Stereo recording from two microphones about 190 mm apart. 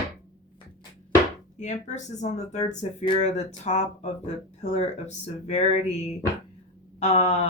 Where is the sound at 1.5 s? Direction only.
40° left (ahead or behind).